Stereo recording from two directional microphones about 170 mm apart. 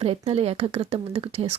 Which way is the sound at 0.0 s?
35° right (ahead or behind).